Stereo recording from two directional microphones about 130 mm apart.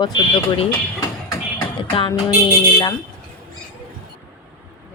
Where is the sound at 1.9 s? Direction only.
40° left (ahead or behind).